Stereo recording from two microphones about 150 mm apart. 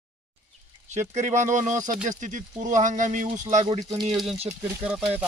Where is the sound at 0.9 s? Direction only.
50° right (ahead or behind).